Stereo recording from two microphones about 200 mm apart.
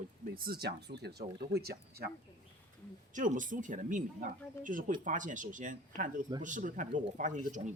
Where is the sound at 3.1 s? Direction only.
40° right (ahead or behind).